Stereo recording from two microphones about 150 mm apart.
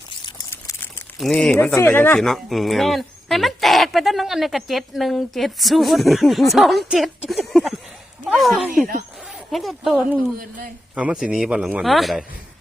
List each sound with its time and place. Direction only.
0.5 s a sound: 15° left (ahead or behind)
1.2 s speech: centre (ahead or behind)
1.5 s speech: 15° left (ahead or behind)
2.1 s speech: centre (ahead or behind)